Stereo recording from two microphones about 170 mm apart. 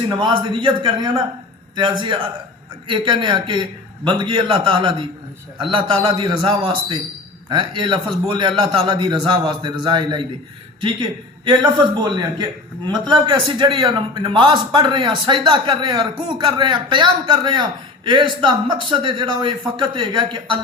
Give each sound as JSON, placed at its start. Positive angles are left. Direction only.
{"t": 0.1, "sound": "a man's voice", "side_deg": -25}
{"t": 11.4, "sound": "a man's voice", "side_deg": -25}